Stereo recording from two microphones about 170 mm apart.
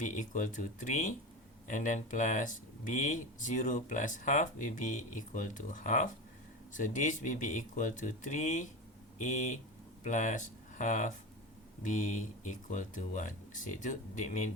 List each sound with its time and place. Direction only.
0.0 s speech: 50° left (ahead or behind)